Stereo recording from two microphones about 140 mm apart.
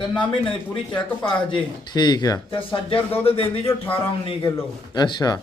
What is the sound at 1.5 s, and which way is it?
Speech, 30° left (ahead or behind).